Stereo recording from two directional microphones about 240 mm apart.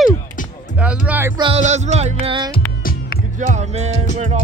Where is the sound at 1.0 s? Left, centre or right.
Centre.